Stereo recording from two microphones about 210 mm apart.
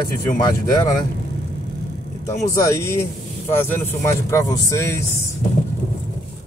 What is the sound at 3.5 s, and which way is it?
Speech, 10° left (ahead or behind).